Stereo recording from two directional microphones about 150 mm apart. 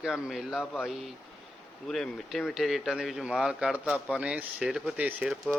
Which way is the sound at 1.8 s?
Centre (ahead or behind).